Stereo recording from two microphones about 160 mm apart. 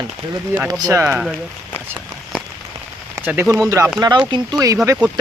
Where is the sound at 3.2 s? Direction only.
15° right (ahead or behind).